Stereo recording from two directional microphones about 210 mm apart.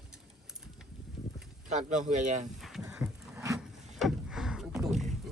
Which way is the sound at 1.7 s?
35° right (ahead or behind).